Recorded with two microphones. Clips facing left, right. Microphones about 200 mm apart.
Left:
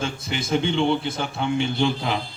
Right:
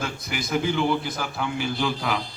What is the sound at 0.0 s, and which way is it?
A man's voice, 25° left (ahead or behind).